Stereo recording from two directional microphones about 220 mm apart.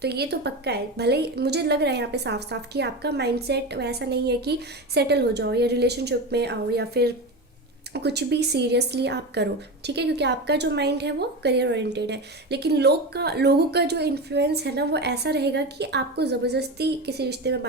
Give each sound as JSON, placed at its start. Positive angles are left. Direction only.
{"t": 0.0, "sound": "speech", "side_deg": -50}